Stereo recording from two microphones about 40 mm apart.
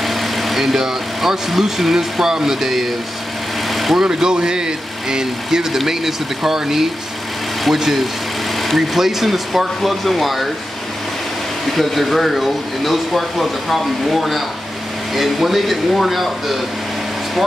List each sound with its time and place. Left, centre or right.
0.0 s speech: centre
3.7 s vehicle: centre
4.0 s speech: centre
11.7 s speech: centre